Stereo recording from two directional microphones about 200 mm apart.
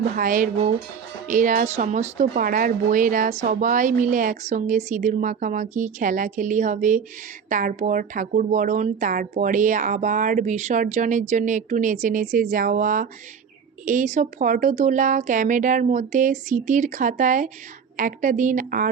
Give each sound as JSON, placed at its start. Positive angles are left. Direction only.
{"t": 0.2, "sound": "speech", "side_deg": -40}